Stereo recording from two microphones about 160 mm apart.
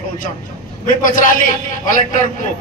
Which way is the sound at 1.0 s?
55° left (ahead or behind).